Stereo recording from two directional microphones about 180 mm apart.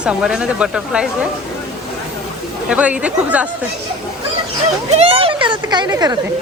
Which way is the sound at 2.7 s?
5° right (ahead or behind).